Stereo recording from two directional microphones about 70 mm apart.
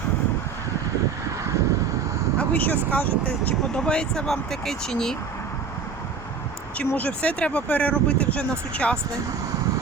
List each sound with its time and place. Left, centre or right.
2.4 s speech: left
3.8 s speech: centre
6.7 s speech: centre